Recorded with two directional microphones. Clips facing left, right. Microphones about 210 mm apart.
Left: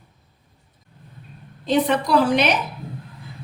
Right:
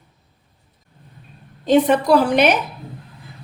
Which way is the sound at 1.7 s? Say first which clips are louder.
Right 5 dB; 50° right (ahead or behind).